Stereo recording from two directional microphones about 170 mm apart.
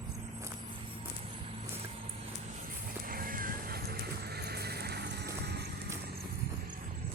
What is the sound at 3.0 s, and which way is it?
Music, 55° right (ahead or behind).